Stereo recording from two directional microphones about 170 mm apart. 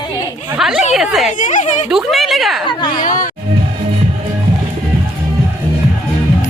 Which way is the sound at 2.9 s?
50° left (ahead or behind).